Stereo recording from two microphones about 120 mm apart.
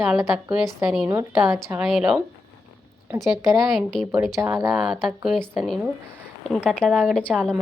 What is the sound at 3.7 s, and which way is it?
Speech, 5° left (ahead or behind).